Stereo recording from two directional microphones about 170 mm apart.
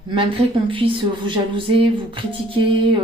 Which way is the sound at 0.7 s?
30° right (ahead or behind).